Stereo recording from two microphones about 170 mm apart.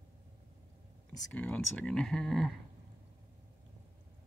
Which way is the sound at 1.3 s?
10° left (ahead or behind).